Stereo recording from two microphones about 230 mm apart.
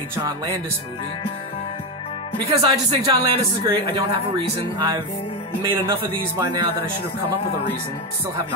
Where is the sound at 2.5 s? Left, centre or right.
Right.